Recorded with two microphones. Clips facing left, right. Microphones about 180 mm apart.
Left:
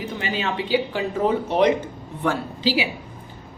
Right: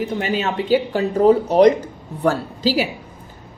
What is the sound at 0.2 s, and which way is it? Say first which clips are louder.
Speech: right 4 dB; 45° right (ahead or behind).